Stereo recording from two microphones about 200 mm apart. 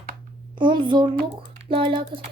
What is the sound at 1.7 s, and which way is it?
Speech, 25° right (ahead or behind).